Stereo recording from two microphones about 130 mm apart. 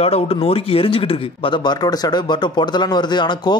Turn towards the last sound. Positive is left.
turn(degrees=35)  # may be behind; listen again after turning